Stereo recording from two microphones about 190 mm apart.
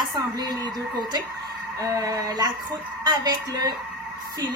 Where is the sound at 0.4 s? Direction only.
20° right (ahead or behind).